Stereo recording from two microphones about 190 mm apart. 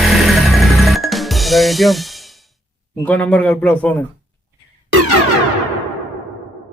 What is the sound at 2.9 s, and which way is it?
A man's voice, 5° left (ahead or behind).